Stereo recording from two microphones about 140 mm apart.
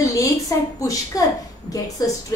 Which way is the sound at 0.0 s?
25° left (ahead or behind).